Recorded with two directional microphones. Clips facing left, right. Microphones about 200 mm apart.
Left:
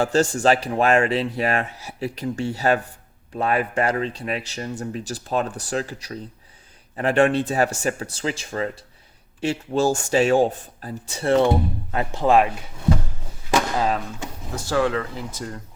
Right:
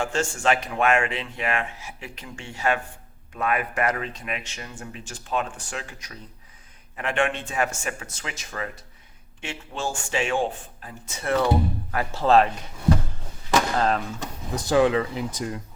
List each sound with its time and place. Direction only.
0.0 s a man's voice: 35° left (ahead or behind); by 12.5 s 10° left (ahead or behind)
13.7 s speech: 5° left (ahead or behind)
14.5 s speech: 20° right (ahead or behind)